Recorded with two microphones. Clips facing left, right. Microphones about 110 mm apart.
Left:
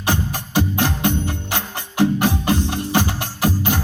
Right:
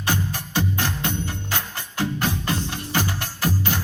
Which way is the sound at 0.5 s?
15° left (ahead or behind).